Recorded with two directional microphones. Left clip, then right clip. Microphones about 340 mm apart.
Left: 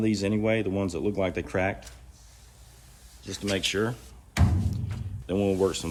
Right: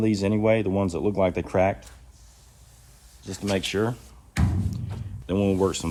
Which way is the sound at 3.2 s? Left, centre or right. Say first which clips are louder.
Right 1 dB; centre.